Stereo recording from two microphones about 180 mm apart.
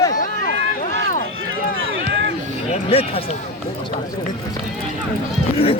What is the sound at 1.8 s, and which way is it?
Run, 90° right.